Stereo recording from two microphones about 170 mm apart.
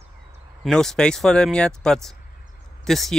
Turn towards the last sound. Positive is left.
turn(degrees=0)  # may be behind; listen again after turning